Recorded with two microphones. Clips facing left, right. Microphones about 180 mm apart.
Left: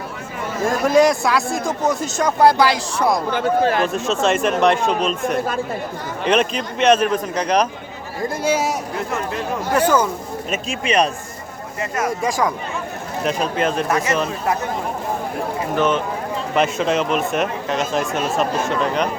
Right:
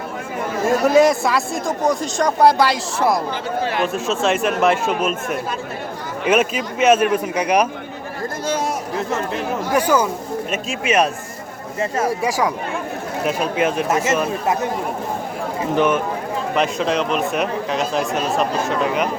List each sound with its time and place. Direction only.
0.7 s speech: centre (ahead or behind)
3.3 s speech: 50° left (ahead or behind)
3.8 s speech: centre (ahead or behind)
6.2 s a man's voice: 5° right (ahead or behind)
8.2 s a man's voice: 10° left (ahead or behind)
9.7 s a man's voice: 10° right (ahead or behind)
11.8 s speech: 30° right (ahead or behind)
12.2 s a man's voice: 10° right (ahead or behind)
13.8 s speech: 25° right (ahead or behind)
15.7 s a man's voice: 15° right (ahead or behind)
16.6 s speech: centre (ahead or behind)